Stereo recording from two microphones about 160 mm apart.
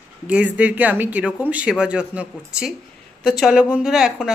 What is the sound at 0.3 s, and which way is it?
Speech, 10° right (ahead or behind).